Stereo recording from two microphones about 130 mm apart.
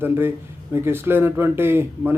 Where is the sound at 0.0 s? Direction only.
15° right (ahead or behind).